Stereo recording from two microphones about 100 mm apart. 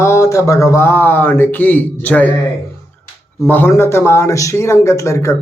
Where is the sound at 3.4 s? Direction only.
20° left (ahead or behind).